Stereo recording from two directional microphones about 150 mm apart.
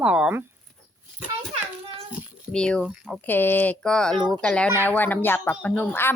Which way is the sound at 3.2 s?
15° left (ahead or behind).